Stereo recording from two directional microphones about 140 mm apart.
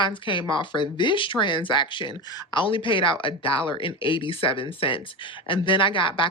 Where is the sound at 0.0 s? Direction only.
35° left (ahead or behind).